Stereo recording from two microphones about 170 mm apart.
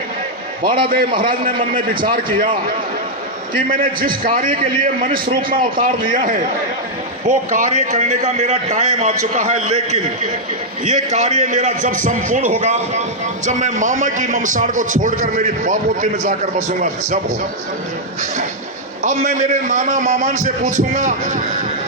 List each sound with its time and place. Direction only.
3.5 s a man's voice: 55° right (ahead or behind)
19.0 s a man's voice: 45° right (ahead or behind)